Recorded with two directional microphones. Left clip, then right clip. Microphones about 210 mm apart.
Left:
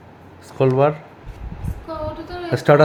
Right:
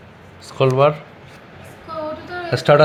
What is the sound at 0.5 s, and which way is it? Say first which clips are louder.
Speech: right 2 dB; 20° left (ahead or behind).